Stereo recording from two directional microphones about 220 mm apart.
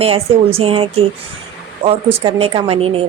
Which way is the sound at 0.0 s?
25° right (ahead or behind).